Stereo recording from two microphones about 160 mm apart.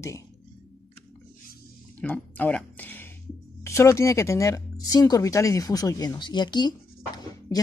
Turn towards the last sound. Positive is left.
turn(degrees=25)  # may be behind; listen again after turning